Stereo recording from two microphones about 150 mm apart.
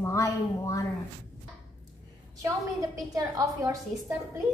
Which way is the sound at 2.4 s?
25° right (ahead or behind).